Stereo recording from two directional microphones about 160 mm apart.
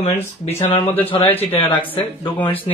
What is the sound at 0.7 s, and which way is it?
Speech, 15° left (ahead or behind).